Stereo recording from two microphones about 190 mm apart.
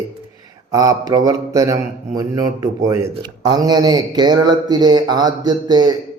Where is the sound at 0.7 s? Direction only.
20° right (ahead or behind).